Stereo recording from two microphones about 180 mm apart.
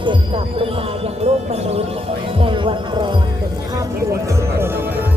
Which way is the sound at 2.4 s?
30° right (ahead or behind).